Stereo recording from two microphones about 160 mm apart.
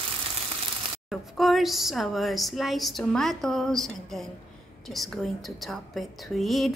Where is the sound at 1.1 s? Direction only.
Centre (ahead or behind).